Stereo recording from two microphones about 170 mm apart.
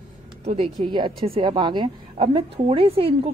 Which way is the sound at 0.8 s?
25° right (ahead or behind).